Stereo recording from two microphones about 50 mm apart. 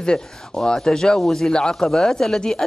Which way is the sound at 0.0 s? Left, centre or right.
Centre.